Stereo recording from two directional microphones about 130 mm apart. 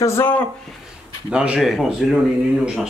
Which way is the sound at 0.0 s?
20° left (ahead or behind).